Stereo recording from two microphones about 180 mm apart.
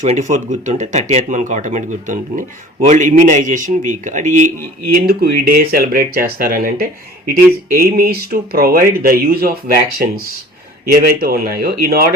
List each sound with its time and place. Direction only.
0.0 s a man's voice: 40° right (ahead or behind)
5.0 s speech: 60° right (ahead or behind)